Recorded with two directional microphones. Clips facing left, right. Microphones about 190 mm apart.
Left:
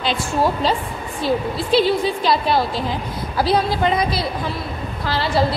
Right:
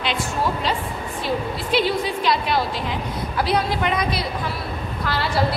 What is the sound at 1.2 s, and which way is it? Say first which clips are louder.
A woman's voice: left 5 dB; 30° left (ahead or behind).